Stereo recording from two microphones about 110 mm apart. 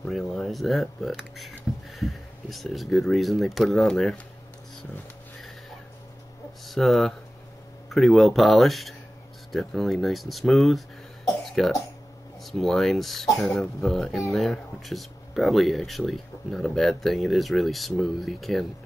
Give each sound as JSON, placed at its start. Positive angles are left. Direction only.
{"t": 0.1, "sound": "speech", "side_deg": 0}
{"t": 6.6, "sound": "speech", "side_deg": 0}